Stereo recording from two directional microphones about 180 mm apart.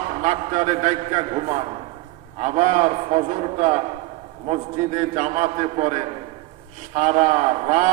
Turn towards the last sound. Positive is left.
turn(degrees=-40)  # may be behind; listen again after turning